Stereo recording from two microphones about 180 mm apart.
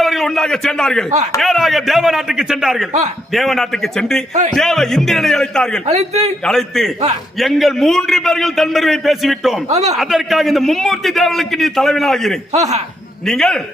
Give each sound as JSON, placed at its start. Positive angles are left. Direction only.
{"t": 0.0, "sound": "a man's voice", "side_deg": 0}
{"t": 5.8, "sound": "a man's voice", "side_deg": -40}
{"t": 6.4, "sound": "a man's voice", "side_deg": 0}
{"t": 9.6, "sound": "a man's voice", "side_deg": -40}
{"t": 10.0, "sound": "a man's voice", "side_deg": 0}
{"t": 12.5, "sound": "a man's voice", "side_deg": -40}
{"t": 13.2, "sound": "a man's voice", "side_deg": 5}